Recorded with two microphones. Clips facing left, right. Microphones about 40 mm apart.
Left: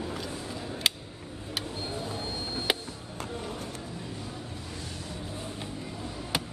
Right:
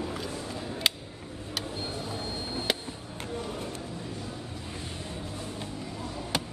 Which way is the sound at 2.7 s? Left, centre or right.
Centre.